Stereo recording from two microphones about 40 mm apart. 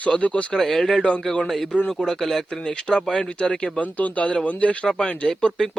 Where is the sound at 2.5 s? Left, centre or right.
Left.